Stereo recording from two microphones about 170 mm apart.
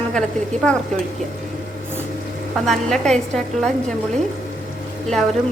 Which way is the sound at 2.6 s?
5° left (ahead or behind).